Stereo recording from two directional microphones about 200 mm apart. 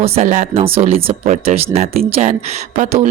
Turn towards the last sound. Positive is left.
turn(degrees=-40)  # may be behind; listen again after turning